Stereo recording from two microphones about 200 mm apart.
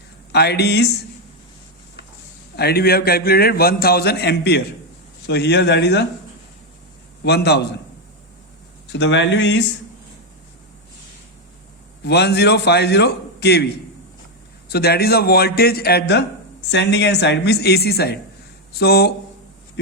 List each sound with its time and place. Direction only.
0.3 s a man's voice: 55° left (ahead or behind)
2.6 s a man's voice: 50° left (ahead or behind)
7.3 s a man's voice: 55° left (ahead or behind)
8.9 s a man's voice: 60° left (ahead or behind)
12.0 s a man's voice: 55° left (ahead or behind)
14.7 s a man's voice: 50° left (ahead or behind)